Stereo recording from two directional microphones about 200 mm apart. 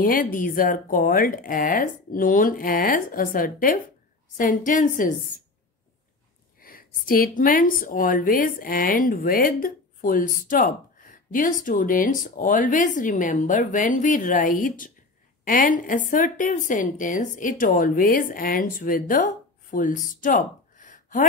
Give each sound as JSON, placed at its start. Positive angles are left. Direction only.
{"t": 0.0, "sound": "a woman's voice", "side_deg": 45}
{"t": 6.6, "sound": "a woman's voice", "side_deg": 45}